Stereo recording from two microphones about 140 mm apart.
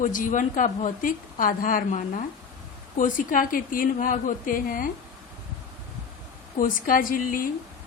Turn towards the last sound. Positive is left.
turn(degrees=75)  # may be behind; listen again after turning